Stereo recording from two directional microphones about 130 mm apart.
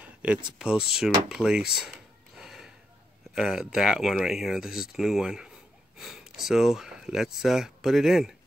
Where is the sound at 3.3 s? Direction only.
5° right (ahead or behind).